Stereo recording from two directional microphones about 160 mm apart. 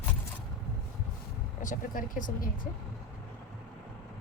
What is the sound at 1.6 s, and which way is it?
Speech, 55° left (ahead or behind).